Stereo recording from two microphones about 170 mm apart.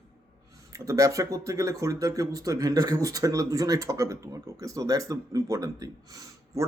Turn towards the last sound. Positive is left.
turn(degrees=-20)  # may be behind; listen again after turning